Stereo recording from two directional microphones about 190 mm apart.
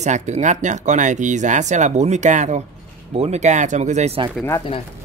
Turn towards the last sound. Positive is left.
turn(degrees=30)  # may be behind; listen again after turning